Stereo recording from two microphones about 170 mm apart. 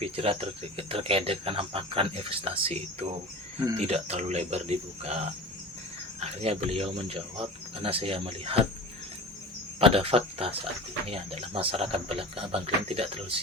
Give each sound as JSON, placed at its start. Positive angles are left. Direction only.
{"t": 0.0, "sound": "speech", "side_deg": -35}
{"t": 9.8, "sound": "speech", "side_deg": -35}